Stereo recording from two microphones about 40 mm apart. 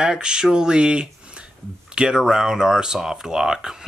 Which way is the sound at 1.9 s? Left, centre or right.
Right.